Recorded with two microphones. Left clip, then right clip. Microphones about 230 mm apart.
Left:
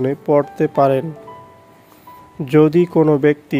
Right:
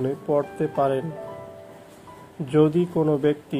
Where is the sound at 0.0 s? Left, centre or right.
Left.